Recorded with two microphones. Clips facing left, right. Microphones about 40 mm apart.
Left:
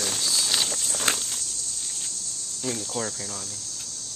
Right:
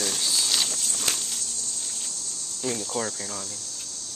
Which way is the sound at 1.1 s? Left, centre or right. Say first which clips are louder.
Even; centre.